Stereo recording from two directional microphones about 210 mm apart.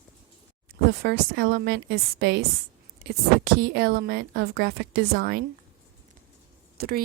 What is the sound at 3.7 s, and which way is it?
A woman's voice, 50° right (ahead or behind).